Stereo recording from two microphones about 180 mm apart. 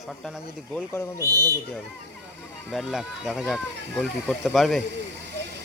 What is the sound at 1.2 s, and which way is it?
Speech, 20° right (ahead or behind).